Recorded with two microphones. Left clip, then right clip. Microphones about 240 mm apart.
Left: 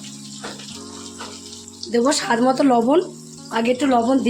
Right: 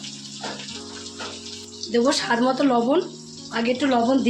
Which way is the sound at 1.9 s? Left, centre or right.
Left.